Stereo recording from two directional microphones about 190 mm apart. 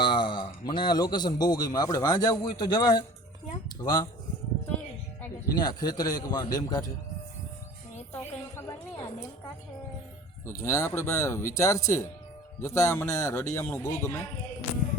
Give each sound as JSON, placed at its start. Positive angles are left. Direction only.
{"t": 0.0, "sound": "a man's voice", "side_deg": 25}
{"t": 5.5, "sound": "a man's voice", "side_deg": 20}
{"t": 8.1, "sound": "a sound", "side_deg": 10}
{"t": 10.4, "sound": "speech", "side_deg": 15}